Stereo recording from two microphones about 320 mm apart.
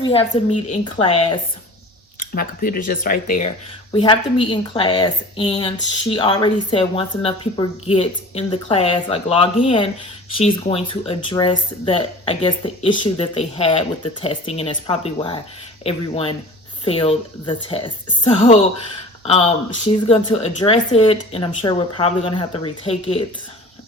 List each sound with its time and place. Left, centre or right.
0.0 s speech: centre